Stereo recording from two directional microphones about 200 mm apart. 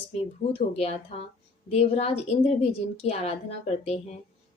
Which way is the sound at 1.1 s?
30° left (ahead or behind).